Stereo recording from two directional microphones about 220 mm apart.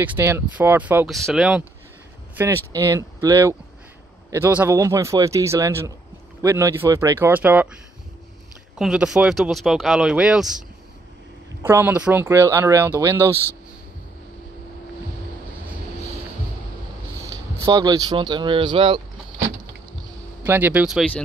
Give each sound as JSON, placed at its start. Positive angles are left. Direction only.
{"t": 0.0, "sound": "speech", "side_deg": -10}
{"t": 8.7, "sound": "speech", "side_deg": -5}
{"t": 11.6, "sound": "speech", "side_deg": -10}
{"t": 17.3, "sound": "speech", "side_deg": -15}
{"t": 20.4, "sound": "speech", "side_deg": -10}